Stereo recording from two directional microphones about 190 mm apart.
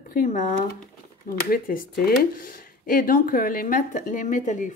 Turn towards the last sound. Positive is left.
turn(degrees=40)  # may be behind; listen again after turning